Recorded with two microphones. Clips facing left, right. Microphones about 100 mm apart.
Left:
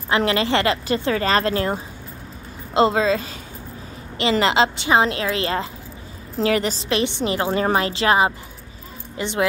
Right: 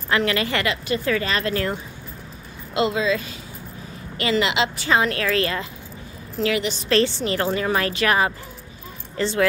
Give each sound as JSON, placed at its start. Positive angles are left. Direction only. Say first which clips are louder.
{"t": 0.1, "sound": "a woman's voice", "louder": "left 3 dB", "side_deg": 30}
{"t": 4.7, "sound": "a woman's voice", "louder": "left 2 dB", "side_deg": 25}
{"t": 6.4, "sound": "speech", "louder": "left 3 dB", "side_deg": 40}
{"t": 6.9, "sound": "a woman's voice", "louder": "right 3 dB", "side_deg": 15}